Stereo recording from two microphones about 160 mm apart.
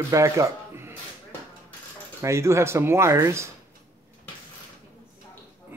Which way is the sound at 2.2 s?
15° right (ahead or behind).